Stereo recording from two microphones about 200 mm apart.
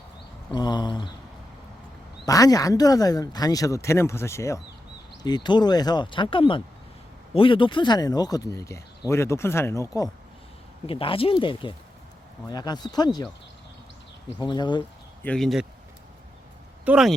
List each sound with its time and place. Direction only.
0.5 s speech: 20° left (ahead or behind)
2.2 s speech: 15° left (ahead or behind)
10.8 s speech: 25° left (ahead or behind)
14.3 s speech: 20° left (ahead or behind)
15.2 s speech: 5° left (ahead or behind)
16.8 s speech: 5° right (ahead or behind)